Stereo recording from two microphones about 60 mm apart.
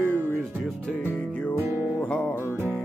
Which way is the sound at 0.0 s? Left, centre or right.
Right.